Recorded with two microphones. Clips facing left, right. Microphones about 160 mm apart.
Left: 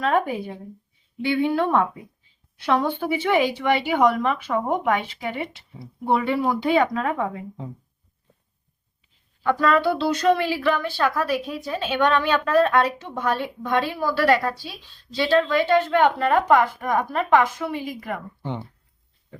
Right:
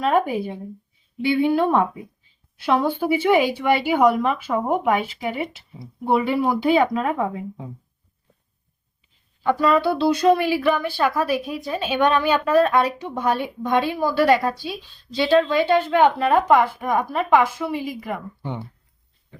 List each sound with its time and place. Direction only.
0.0 s speech: 10° right (ahead or behind)
9.4 s speech: 10° right (ahead or behind)